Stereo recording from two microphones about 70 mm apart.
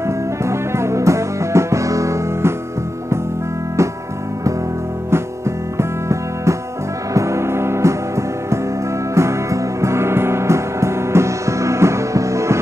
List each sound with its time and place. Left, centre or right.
0.0 s music: right
5.1 s music: right